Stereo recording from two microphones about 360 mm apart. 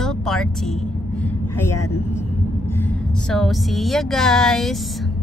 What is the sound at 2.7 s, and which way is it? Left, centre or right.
Speech, centre.